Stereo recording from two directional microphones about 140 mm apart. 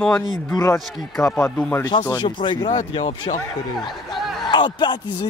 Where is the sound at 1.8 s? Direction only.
25° left (ahead or behind).